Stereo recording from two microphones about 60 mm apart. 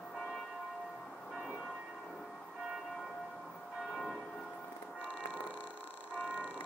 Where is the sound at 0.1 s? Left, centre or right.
Centre.